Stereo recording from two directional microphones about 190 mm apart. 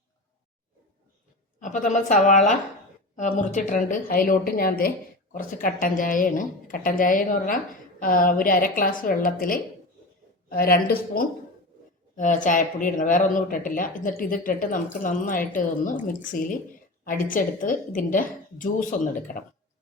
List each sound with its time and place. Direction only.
1.5 s a woman's voice: 40° left (ahead or behind)